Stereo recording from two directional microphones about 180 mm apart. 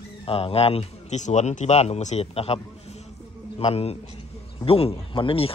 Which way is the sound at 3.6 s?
35° left (ahead or behind).